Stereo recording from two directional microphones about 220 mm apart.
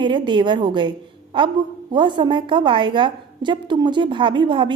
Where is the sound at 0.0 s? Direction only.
20° right (ahead or behind).